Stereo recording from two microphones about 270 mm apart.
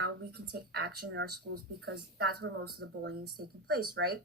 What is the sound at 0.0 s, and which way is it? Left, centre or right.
Speech, right.